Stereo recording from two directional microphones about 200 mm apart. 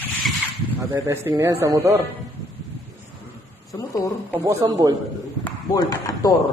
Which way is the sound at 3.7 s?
15° left (ahead or behind).